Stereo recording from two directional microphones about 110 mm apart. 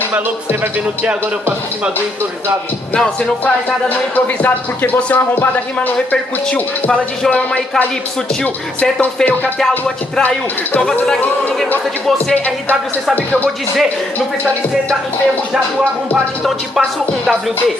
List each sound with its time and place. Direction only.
2.9 s speech: 10° left (ahead or behind)
6.5 s speech: 10° left (ahead or behind)
9.0 s speech: 15° left (ahead or behind)
9.6 s music: 5° left (ahead or behind)
10.2 s speech: 10° left (ahead or behind)